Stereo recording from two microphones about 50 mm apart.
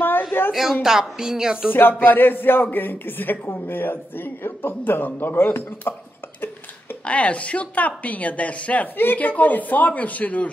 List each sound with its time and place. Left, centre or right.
0.0 s a sound: left
0.5 s a man's voice: centre
1.7 s a man's voice: left
7.1 s speech: left
8.9 s speech: left